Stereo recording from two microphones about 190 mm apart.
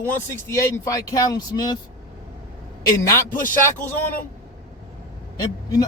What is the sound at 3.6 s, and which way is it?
Speech, 10° left (ahead or behind).